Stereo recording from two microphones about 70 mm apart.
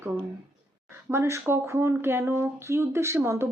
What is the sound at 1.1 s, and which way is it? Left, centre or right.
Speech, right.